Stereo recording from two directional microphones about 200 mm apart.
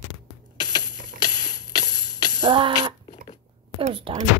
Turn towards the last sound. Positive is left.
turn(degrees=-25)  # may be behind; listen again after turning